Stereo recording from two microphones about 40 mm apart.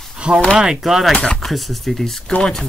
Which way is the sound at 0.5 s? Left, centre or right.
Centre.